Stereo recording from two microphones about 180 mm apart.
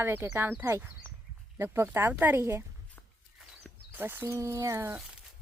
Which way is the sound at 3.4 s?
Centre (ahead or behind).